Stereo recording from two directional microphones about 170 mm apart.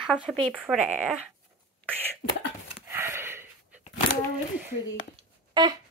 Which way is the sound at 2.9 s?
15° right (ahead or behind).